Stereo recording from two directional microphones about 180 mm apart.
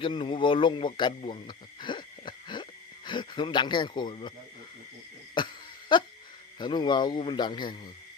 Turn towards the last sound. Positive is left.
turn(degrees=25)  # may be behind; listen again after turning